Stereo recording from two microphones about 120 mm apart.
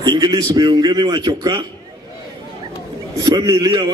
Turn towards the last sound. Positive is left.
turn(degrees=-35)  # may be behind; listen again after turning